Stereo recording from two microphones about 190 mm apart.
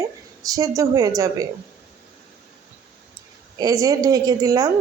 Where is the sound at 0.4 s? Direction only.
20° right (ahead or behind).